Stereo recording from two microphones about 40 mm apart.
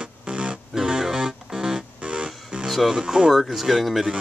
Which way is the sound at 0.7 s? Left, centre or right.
Centre.